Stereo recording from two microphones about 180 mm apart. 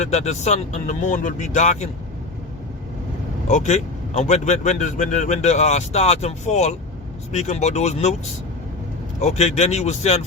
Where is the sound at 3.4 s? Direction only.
40° left (ahead or behind).